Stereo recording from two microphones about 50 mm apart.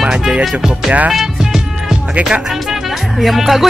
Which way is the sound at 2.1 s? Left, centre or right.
Centre.